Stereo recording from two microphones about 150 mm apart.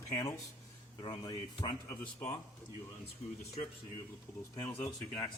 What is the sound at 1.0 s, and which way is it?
Speech, 30° left (ahead or behind).